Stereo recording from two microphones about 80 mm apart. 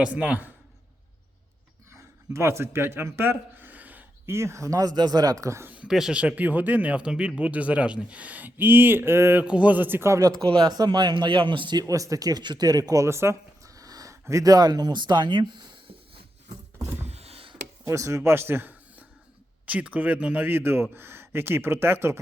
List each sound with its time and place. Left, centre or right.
0.0 s speech: centre
1.9 s a sound: right
4.4 s speech: right
5.6 s a sound: centre
5.9 s speech: centre; by 9.4 s right
9.4 s speech: centre
10.2 s speech: right
11.8 s speech: right
13.7 s a sound: right
17.8 s speech: right